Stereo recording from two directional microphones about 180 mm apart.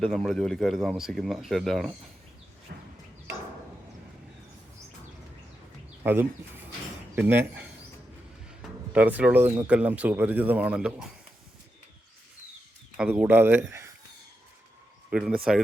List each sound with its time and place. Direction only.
0.0 s speech: centre (ahead or behind)
2.7 s a sound: 55° right (ahead or behind)
6.0 s speech: 10° right (ahead or behind)
8.9 s speech: 10° right (ahead or behind)
13.0 s speech: 10° right (ahead or behind)
15.1 s speech: 5° right (ahead or behind)